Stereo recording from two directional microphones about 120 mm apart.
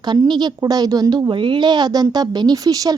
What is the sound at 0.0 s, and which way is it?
A woman's voice, 35° right (ahead or behind).